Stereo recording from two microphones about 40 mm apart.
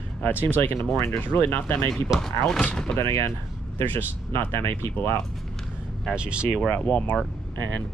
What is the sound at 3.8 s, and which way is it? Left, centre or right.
Speech, left.